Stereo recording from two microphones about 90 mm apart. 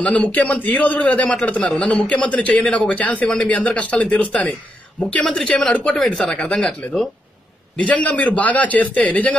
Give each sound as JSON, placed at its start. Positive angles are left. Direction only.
{"t": 0.0, "sound": "a man's voice", "side_deg": 15}